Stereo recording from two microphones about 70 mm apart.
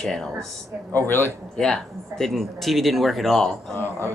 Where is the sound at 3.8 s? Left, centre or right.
Left.